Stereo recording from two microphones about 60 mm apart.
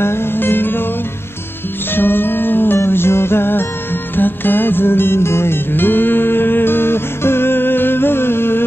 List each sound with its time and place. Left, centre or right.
0.0 s music: left
2.0 s music: left